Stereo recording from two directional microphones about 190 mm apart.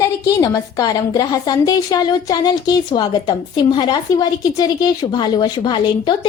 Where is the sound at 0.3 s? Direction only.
20° left (ahead or behind).